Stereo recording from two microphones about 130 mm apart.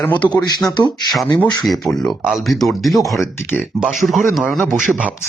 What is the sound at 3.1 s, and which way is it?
Speech, 20° left (ahead or behind).